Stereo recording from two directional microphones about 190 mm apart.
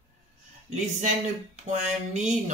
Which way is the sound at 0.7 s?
40° right (ahead or behind).